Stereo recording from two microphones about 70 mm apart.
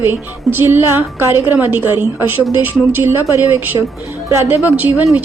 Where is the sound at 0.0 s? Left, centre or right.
Right.